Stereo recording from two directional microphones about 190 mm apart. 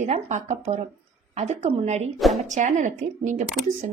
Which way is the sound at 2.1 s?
Centre (ahead or behind).